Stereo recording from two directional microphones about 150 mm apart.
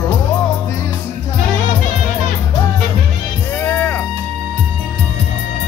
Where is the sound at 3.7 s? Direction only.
15° left (ahead or behind).